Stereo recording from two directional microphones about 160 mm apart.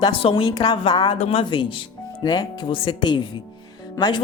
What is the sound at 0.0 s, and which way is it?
Speech, 35° left (ahead or behind).